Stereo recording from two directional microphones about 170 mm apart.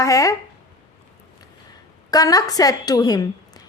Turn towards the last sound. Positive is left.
turn(degrees=20)  # may be behind; listen again after turning